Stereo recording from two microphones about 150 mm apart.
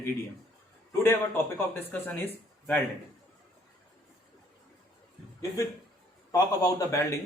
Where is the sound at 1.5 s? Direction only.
15° left (ahead or behind).